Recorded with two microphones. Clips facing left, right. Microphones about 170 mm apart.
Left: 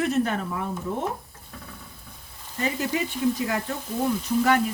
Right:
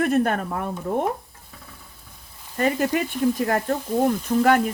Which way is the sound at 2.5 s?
55° right (ahead or behind).